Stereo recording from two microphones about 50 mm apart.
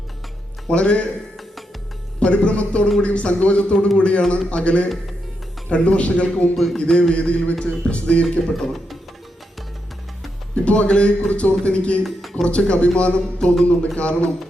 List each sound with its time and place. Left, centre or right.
0.7 s speech: left
2.1 s speech: left
8.2 s speech: centre
10.5 s speech: left